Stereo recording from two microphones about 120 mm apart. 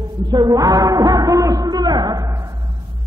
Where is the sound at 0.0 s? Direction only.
35° right (ahead or behind).